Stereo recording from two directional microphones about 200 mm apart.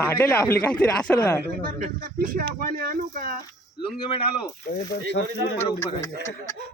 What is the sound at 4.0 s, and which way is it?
Speech, 25° left (ahead or behind).